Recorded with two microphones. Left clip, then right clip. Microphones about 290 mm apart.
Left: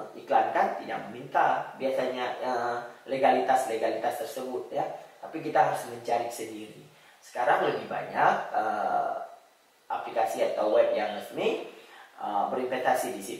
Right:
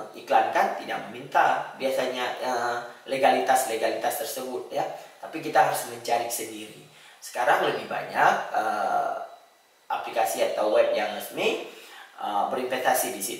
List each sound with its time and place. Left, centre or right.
0.4 s speech: centre
4.4 s speech: left
4.7 s speech: centre
7.5 s speech: centre
10.2 s speech: centre
12.2 s speech: left
12.5 s speech: centre